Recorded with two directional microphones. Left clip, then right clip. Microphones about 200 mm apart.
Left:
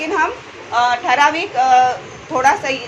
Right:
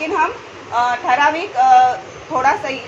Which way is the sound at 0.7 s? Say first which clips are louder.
Left 1 dB; 15° left (ahead or behind).